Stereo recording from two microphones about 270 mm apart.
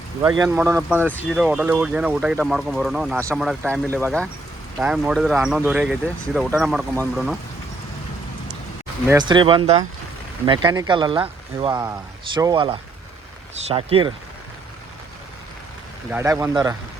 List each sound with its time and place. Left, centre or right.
0.2 s speech: centre
0.9 s speech: centre
9.0 s speech: centre
16.0 s speech: centre